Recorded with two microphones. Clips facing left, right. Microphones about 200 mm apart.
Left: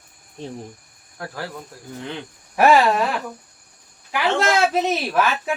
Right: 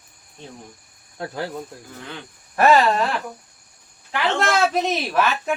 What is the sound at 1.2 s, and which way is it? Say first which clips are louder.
Speech: right 3 dB; 25° right (ahead or behind).